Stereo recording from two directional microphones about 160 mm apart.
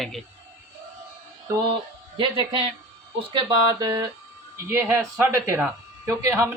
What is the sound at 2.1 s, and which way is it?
Speech, 30° right (ahead or behind).